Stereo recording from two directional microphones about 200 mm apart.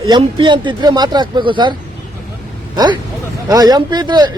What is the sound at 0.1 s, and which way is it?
Speech, 25° right (ahead or behind).